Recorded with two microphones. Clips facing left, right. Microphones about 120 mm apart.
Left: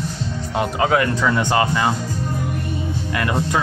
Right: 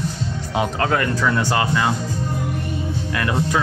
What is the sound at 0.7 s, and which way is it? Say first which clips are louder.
Speech: left 2 dB; 10° left (ahead or behind).